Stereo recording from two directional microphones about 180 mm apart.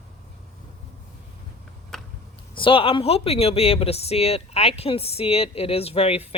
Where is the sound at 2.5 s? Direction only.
30° left (ahead or behind).